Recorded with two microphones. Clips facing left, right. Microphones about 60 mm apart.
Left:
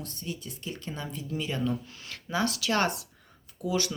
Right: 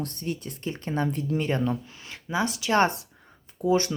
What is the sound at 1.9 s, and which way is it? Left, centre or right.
Speech, right.